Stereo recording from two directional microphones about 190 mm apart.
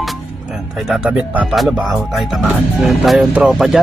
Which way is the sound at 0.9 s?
5° right (ahead or behind).